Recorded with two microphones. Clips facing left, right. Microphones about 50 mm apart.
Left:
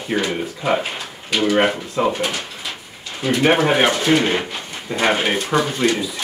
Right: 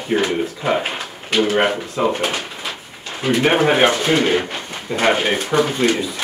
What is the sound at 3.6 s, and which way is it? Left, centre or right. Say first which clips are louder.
Speech: right 2 dB; centre.